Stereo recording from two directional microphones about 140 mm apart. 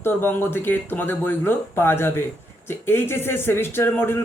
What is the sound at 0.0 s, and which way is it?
Speech, 15° left (ahead or behind).